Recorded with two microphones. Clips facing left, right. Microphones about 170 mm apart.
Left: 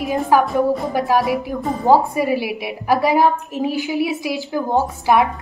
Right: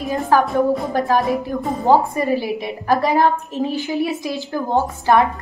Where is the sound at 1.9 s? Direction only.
10° left (ahead or behind).